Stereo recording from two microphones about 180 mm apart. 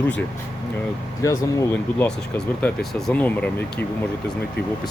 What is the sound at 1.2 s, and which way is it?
Speech, 15° left (ahead or behind).